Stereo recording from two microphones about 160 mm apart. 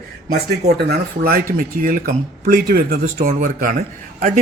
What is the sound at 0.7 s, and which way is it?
A man's voice, 70° right (ahead or behind).